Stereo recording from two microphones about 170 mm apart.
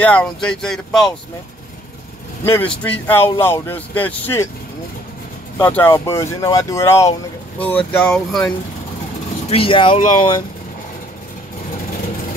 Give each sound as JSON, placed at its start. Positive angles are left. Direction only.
{"t": 0.0, "sound": "speech", "side_deg": 5}
{"t": 2.4, "sound": "speech", "side_deg": 10}
{"t": 5.6, "sound": "speech", "side_deg": 10}
{"t": 9.5, "sound": "speech", "side_deg": 30}